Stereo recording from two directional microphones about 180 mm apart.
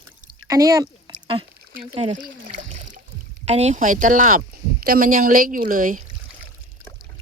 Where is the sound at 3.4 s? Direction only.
40° right (ahead or behind).